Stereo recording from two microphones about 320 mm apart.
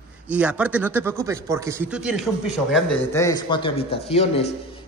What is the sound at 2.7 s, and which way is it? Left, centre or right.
A man's voice, centre.